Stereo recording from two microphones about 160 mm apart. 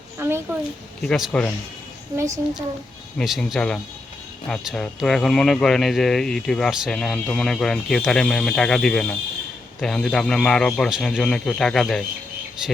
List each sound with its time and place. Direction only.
0.2 s a sound: 15° right (ahead or behind)
1.0 s speech: centre (ahead or behind)
3.2 s speech: centre (ahead or behind)